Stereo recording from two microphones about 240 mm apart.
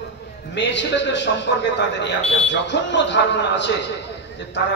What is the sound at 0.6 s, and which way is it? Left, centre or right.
A man's voice, left.